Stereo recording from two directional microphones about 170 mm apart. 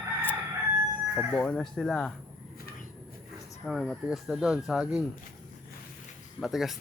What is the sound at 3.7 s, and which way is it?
Speech, centre (ahead or behind).